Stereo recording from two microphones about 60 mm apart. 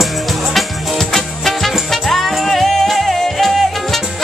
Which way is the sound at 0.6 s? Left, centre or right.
Centre.